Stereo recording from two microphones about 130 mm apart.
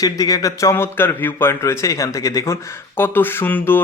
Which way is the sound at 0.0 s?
30° left (ahead or behind).